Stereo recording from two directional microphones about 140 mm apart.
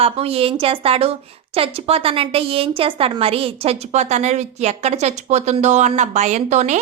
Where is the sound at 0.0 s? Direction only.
45° right (ahead or behind).